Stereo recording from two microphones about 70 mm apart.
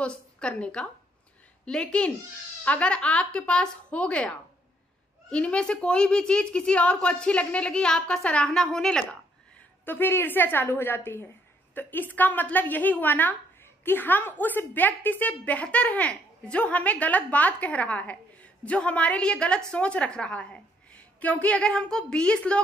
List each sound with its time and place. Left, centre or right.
0.0 s a woman's voice: centre
9.8 s a woman's voice: left; by 22.6 s centre